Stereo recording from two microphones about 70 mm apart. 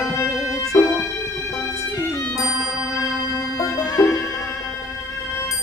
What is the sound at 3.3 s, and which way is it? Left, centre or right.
Music, left.